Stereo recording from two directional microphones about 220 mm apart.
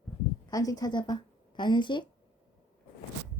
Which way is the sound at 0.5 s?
15° left (ahead or behind).